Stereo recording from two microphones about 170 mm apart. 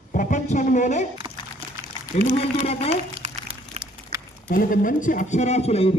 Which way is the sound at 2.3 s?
35° left (ahead or behind).